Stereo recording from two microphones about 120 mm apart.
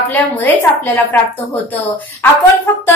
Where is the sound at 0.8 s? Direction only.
15° left (ahead or behind).